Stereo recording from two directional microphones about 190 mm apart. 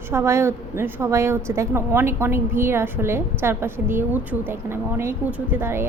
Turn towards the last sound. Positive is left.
turn(degrees=-10)  # may be behind; listen again after turning